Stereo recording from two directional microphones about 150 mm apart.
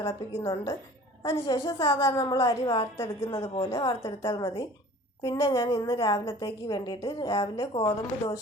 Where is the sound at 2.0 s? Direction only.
25° left (ahead or behind).